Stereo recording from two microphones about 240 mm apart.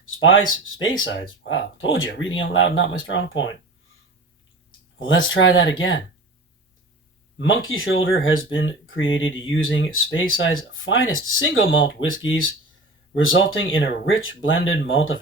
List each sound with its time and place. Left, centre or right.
0.1 s speech: left
4.9 s speech: left
7.3 s speech: left